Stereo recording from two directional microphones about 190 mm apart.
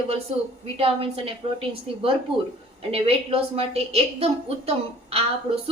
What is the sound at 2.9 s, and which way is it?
A woman's voice, 30° right (ahead or behind).